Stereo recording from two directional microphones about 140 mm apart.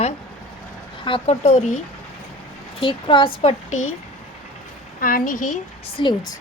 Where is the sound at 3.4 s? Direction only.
60° left (ahead or behind).